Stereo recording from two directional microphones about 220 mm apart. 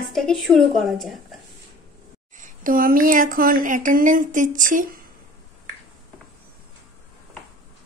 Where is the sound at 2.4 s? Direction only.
40° right (ahead or behind).